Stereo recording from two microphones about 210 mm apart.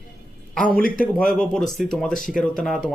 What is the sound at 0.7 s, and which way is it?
Speech, 45° left (ahead or behind).